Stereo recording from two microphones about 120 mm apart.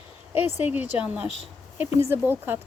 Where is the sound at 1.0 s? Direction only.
10° right (ahead or behind).